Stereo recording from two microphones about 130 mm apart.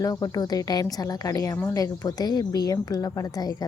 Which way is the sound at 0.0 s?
25° left (ahead or behind).